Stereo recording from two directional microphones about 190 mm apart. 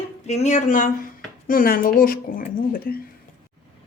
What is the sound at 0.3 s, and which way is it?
A woman's voice, 40° left (ahead or behind).